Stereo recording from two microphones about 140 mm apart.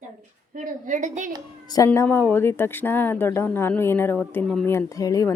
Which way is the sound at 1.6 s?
25° left (ahead or behind).